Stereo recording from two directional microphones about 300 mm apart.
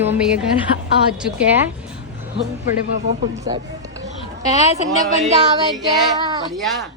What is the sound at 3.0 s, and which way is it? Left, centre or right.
Speech, right.